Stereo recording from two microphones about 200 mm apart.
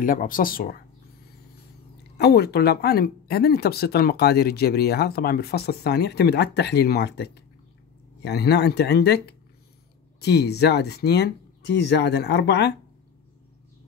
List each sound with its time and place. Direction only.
0.0 s speech: 45° left (ahead or behind)
2.1 s speech: 55° left (ahead or behind)